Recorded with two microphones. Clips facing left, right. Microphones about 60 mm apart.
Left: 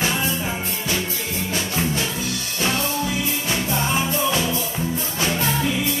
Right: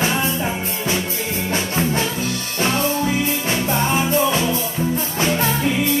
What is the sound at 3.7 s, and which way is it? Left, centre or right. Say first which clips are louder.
Music: right 5 dB; right.